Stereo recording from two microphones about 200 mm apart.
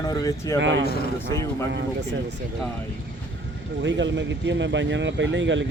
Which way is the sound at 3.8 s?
65° right (ahead or behind).